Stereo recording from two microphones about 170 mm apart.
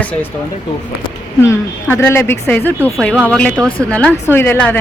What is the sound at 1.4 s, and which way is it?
Speech, 15° left (ahead or behind).